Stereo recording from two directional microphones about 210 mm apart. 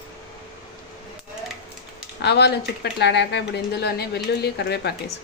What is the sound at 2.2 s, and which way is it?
Speech, 55° left (ahead or behind).